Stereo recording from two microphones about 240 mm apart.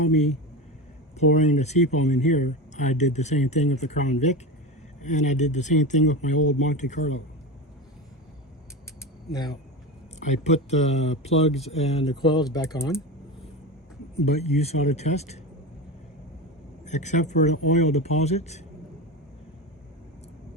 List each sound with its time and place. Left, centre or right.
1.2 s speech: left
9.3 s speech: centre
10.2 s speech: left; by 13.0 s centre
14.3 s speech: left
16.8 s speech: left